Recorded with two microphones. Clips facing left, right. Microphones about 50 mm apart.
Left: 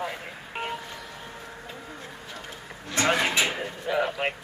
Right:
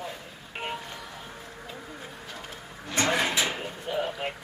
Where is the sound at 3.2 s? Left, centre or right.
Centre.